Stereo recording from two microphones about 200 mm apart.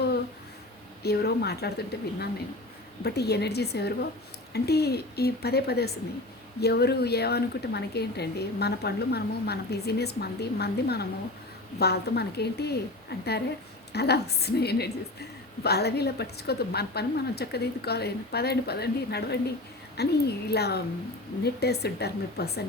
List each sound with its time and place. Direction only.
1.0 s a woman's voice: 55° left (ahead or behind)